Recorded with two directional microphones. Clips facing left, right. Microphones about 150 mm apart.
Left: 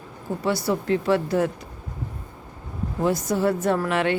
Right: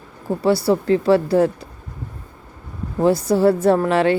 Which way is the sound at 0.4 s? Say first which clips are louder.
Right 7 dB; 30° right (ahead or behind).